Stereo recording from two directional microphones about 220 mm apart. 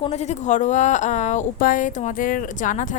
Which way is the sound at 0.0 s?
30° left (ahead or behind).